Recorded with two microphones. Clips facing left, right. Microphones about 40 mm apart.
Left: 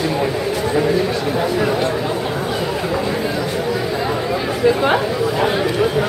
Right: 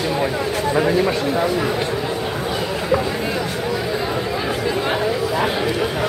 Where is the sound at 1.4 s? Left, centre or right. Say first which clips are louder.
Left 1 dB; centre.